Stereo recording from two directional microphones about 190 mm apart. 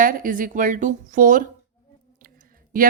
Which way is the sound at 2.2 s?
45° right (ahead or behind).